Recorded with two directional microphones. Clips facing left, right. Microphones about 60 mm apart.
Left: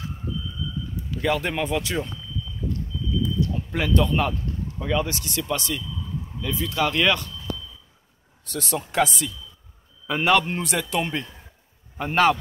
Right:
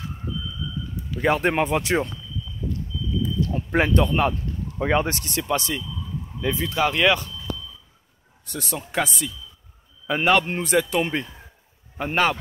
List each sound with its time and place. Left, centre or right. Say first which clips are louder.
1.2 s speech: right 4 dB; right
3.5 s speech: right 5 dB; right
4.7 s speech: right 4 dB; right
5.4 s speech: right 2 dB; right
6.9 s speech: right 2 dB; centre
8.5 s speech: left 3 dB; centre
10.0 s speech: right 1 dB; centre
10.6 s speech: right 4 dB; centre